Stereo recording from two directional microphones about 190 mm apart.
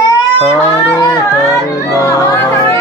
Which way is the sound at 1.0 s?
20° left (ahead or behind).